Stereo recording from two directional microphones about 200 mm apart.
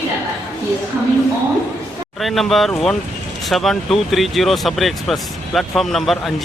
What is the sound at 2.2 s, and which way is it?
Speech, centre (ahead or behind).